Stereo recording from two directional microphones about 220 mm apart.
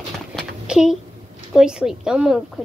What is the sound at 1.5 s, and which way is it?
Speech, 5° right (ahead or behind).